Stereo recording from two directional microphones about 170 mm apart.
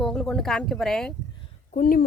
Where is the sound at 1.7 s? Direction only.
55° left (ahead or behind).